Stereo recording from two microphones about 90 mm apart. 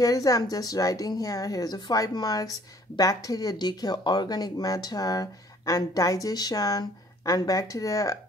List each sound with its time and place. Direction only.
0.0 s speech: 40° left (ahead or behind)